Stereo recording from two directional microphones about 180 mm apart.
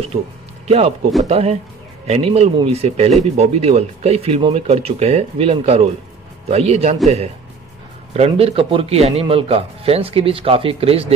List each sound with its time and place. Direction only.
0.1 s a man's voice: 35° right (ahead or behind)
8.1 s a man's voice: 35° right (ahead or behind)